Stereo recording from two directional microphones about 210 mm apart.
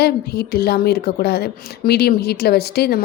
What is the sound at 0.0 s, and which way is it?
A woman's voice, 50° left (ahead or behind).